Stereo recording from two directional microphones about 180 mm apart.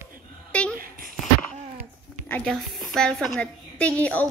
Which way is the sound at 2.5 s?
Centre (ahead or behind).